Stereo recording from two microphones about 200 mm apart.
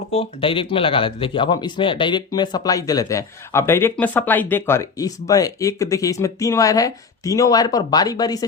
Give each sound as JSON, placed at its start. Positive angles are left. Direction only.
{"t": 0.1, "sound": "speech", "side_deg": 30}